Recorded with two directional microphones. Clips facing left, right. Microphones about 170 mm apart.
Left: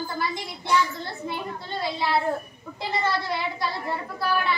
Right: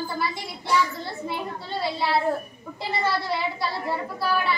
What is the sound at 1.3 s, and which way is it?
Speech, 5° right (ahead or behind).